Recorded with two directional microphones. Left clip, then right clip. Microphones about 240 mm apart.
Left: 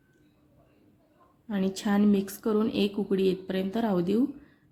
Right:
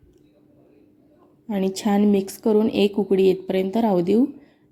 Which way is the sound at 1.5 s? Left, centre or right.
Centre.